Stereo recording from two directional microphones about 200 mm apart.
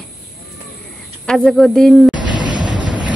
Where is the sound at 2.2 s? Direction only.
20° right (ahead or behind).